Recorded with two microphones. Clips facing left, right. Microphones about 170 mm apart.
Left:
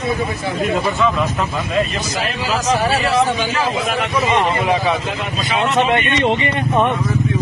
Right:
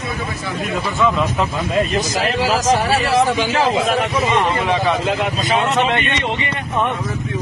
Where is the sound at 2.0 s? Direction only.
40° right (ahead or behind).